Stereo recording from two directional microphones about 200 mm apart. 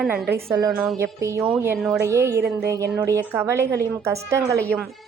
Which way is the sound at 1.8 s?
Centre (ahead or behind).